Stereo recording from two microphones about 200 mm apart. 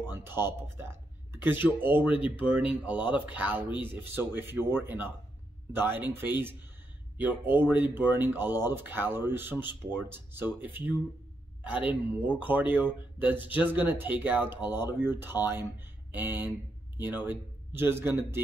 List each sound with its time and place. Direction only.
0.1 s speech: 10° right (ahead or behind)
2.0 s speech: 25° left (ahead or behind)
2.4 s speech: 5° right (ahead or behind)
14.6 s speech: 20° left (ahead or behind)
14.9 s speech: 10° right (ahead or behind)